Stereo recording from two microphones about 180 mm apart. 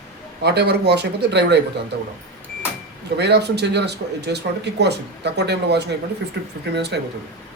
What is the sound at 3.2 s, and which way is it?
Speech, 70° right (ahead or behind).